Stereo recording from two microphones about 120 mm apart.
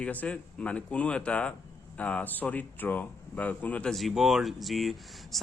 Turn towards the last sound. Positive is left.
turn(degrees=0)  # may be behind; listen again after turning